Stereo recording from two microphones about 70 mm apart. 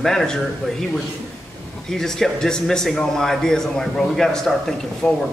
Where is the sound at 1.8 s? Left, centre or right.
Centre.